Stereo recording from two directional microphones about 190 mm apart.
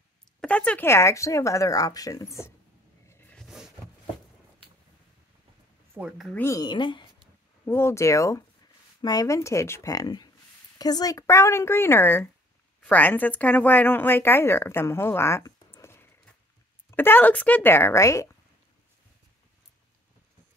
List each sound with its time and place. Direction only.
0.4 s speech: 5° left (ahead or behind)
3.1 s a sound: 10° left (ahead or behind)
3.4 s a sound: centre (ahead or behind)
5.9 s speech: 5° right (ahead or behind)
6.4 s speech: 20° left (ahead or behind)
7.6 s speech: 15° left (ahead or behind)